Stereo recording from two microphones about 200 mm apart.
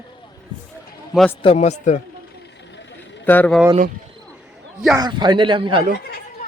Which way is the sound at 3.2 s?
10° left (ahead or behind).